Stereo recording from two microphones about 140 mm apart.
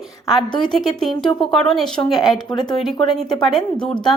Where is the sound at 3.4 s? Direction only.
Centre (ahead or behind).